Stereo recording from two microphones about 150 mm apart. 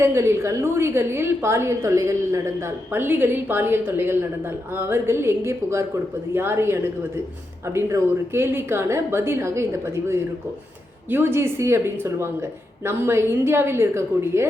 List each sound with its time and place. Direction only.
0.0 s a woman's voice: 15° right (ahead or behind)